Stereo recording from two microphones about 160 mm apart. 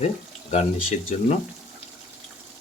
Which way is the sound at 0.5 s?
45° left (ahead or behind).